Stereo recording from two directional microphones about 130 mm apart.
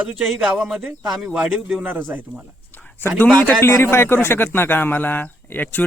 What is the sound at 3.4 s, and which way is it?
A man's voice, 20° left (ahead or behind).